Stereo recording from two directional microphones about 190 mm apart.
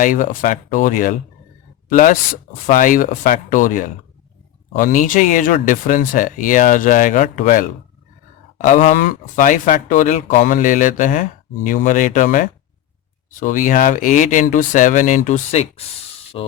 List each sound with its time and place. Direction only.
0.0 s speech: 45° left (ahead or behind)
16.3 s speech: 30° left (ahead or behind)